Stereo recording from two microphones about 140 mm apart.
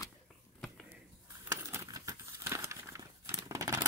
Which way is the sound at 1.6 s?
20° right (ahead or behind).